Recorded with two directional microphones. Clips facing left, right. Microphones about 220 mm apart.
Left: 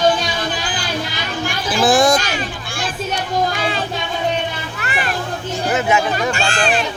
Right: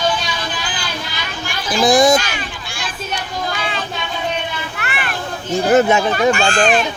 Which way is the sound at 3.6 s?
40° left (ahead or behind).